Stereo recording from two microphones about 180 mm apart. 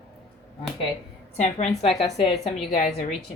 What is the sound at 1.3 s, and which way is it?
Speech, 35° left (ahead or behind).